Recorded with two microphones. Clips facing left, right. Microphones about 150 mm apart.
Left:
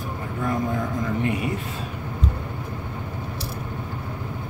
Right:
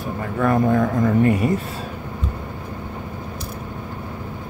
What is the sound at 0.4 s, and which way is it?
Speech, 65° right (ahead or behind).